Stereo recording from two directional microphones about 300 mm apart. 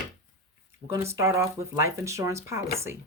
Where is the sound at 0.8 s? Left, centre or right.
Centre.